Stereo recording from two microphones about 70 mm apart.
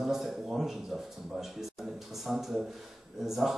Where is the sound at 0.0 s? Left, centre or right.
Centre.